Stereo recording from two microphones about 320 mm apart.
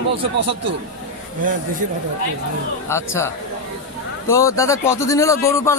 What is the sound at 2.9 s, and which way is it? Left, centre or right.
Speech, centre.